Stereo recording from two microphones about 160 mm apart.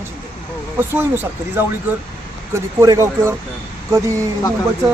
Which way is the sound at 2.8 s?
20° right (ahead or behind).